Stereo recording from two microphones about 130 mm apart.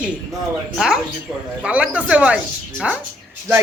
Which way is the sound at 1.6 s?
10° right (ahead or behind).